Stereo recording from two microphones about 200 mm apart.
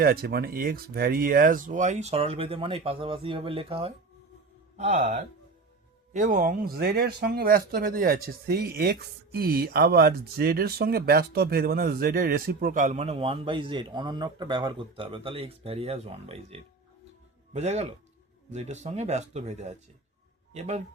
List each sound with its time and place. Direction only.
0.0 s speech: 50° right (ahead or behind); by 20.8 s 35° right (ahead or behind)